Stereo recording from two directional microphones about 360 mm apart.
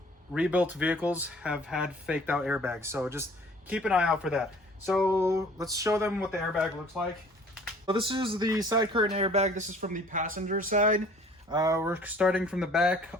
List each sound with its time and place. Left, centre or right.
0.3 s speech: centre
7.9 s speech: centre
11.4 s speech: centre